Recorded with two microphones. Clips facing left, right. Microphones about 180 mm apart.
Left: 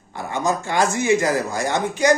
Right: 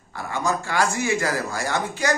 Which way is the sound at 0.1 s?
20° left (ahead or behind).